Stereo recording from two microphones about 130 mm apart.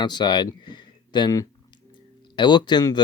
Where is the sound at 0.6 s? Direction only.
35° left (ahead or behind).